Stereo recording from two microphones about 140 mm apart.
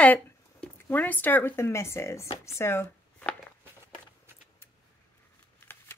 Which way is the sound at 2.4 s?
20° left (ahead or behind).